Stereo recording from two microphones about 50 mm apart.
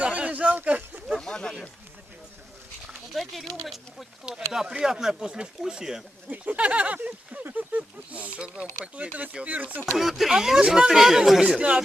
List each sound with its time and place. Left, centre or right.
0.0 s a sound: right
1.3 s speech: centre
3.1 s speech: centre
6.3 s speech: right
10.0 s speech: centre